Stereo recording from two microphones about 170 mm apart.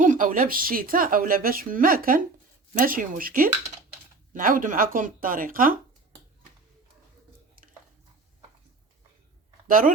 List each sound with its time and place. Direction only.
0.0 s a woman's voice: 50° right (ahead or behind)
9.6 s speech: 55° right (ahead or behind)